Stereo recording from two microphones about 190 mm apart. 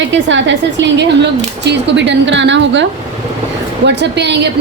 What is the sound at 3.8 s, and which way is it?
Speech, 65° right (ahead or behind).